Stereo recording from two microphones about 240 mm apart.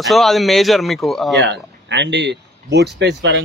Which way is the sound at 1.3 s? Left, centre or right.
Right.